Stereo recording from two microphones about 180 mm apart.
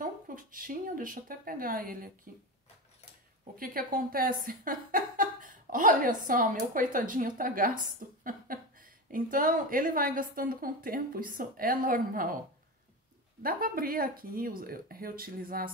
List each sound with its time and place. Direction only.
0.0 s a woman's voice: 50° right (ahead or behind)
3.5 s a woman's voice: 55° right (ahead or behind)
13.4 s a woman's voice: 55° right (ahead or behind)